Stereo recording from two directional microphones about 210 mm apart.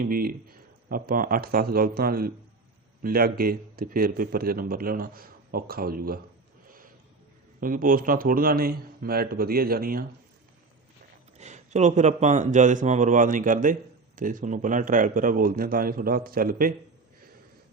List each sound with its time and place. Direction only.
0.0 s speech: 45° right (ahead or behind)
7.6 s speech: 40° right (ahead or behind)
11.3 s speech: 35° right (ahead or behind)